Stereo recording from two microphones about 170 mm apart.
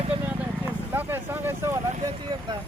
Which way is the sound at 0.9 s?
10° right (ahead or behind).